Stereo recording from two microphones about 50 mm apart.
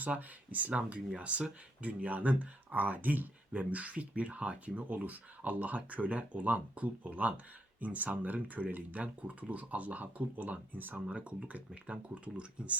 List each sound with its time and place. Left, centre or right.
0.0 s speech: right
11.0 s speech: right